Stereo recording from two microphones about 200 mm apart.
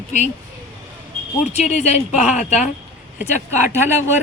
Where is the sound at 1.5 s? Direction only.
35° left (ahead or behind).